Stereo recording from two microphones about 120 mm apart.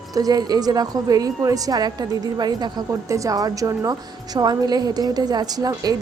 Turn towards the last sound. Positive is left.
turn(degrees=-35)  # may be behind; listen again after turning